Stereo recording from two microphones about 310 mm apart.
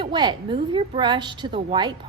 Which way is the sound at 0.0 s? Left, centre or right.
Centre.